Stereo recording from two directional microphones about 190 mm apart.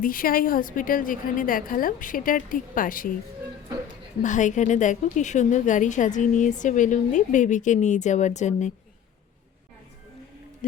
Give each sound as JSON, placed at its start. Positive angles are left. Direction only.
{"t": 0.0, "sound": "a woman's voice", "side_deg": 50}
{"t": 4.2, "sound": "a woman's voice", "side_deg": 40}
{"t": 10.6, "sound": "a woman's voice", "side_deg": 45}